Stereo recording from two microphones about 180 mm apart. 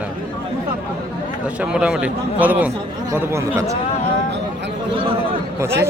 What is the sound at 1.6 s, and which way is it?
A man's voice, 5° right (ahead or behind).